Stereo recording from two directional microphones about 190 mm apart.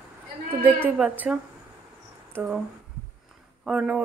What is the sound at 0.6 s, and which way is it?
Speech, 10° right (ahead or behind).